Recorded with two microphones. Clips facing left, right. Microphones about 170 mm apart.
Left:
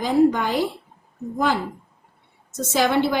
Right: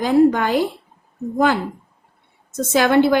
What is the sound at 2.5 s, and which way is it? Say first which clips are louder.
Speech: right 4 dB; 55° right (ahead or behind).